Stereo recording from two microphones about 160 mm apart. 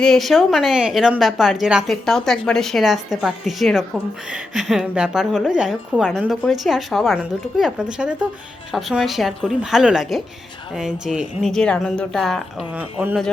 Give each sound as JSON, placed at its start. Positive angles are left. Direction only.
{"t": 0.0, "sound": "speech", "side_deg": 0}
{"t": 12.7, "sound": "speech", "side_deg": -10}